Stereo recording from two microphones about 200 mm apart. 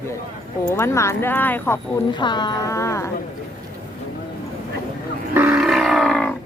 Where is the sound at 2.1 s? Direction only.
20° left (ahead or behind).